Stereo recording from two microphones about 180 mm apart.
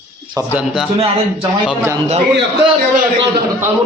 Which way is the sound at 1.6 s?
15° right (ahead or behind).